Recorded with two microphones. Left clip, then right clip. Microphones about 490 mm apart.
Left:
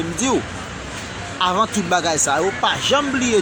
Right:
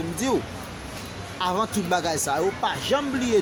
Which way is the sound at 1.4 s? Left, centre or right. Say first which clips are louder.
Left 7 dB; right.